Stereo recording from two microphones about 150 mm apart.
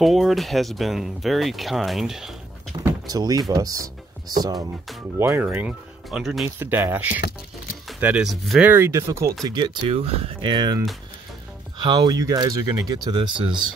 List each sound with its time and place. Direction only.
0.0 s speech: centre (ahead or behind)
2.7 s speech: 25° right (ahead or behind)
5.2 s speech: 15° right (ahead or behind)
6.4 s speech: 15° right (ahead or behind)
8.6 s speech: 15° right (ahead or behind)
9.4 s speech: 30° right (ahead or behind)